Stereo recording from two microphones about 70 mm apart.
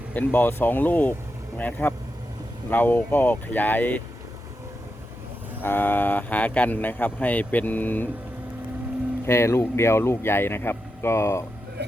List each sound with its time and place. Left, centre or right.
0.1 s speech: left
5.6 s speech: left
9.2 s speech: left